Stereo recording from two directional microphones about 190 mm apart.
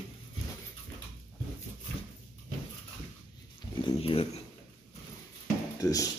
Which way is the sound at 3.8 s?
30° left (ahead or behind).